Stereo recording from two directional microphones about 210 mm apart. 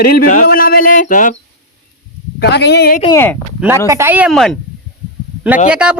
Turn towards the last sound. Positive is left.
turn(degrees=-5)  # may be behind; listen again after turning